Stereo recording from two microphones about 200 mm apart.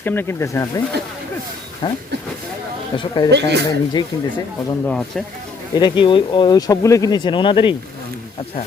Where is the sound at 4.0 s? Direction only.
20° left (ahead or behind).